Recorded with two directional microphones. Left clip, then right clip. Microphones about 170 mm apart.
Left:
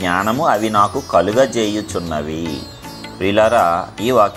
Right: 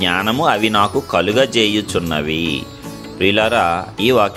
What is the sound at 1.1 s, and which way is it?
Speech, 35° right (ahead or behind).